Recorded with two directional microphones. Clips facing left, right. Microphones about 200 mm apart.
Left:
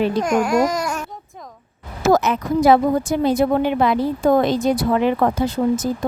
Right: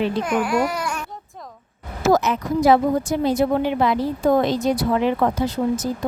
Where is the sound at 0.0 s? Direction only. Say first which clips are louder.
Left 3 dB; 45° left (ahead or behind).